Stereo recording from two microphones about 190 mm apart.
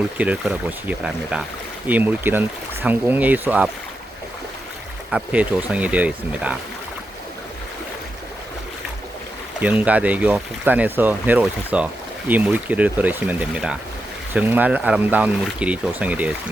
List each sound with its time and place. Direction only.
0.2 s speech: 5° right (ahead or behind)
5.1 s speech: 5° right (ahead or behind)
9.6 s speech: 10° right (ahead or behind)